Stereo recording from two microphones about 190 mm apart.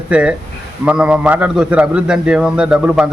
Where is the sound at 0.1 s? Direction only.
5° right (ahead or behind).